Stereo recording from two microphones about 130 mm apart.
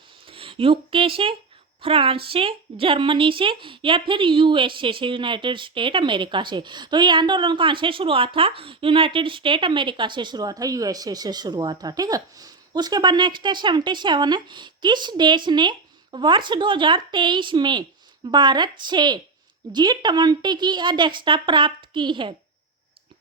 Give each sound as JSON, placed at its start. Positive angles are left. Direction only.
{"t": 0.3, "sound": "a woman's voice", "side_deg": -45}